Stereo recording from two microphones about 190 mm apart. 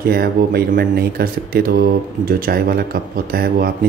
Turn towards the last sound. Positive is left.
turn(degrees=-55)  # may be behind; listen again after turning